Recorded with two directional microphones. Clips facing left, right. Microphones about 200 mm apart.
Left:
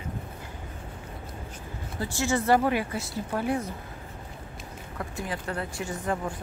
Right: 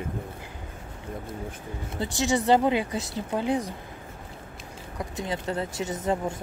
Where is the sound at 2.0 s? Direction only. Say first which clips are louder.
Right 2 dB; 20° right (ahead or behind).